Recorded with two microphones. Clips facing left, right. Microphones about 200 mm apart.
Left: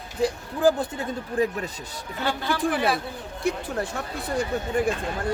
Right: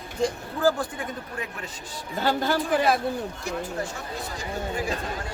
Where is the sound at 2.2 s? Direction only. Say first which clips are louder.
Right 1 dB; 45° right (ahead or behind).